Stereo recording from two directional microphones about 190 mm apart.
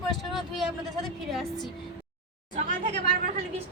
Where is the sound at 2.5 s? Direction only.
40° right (ahead or behind).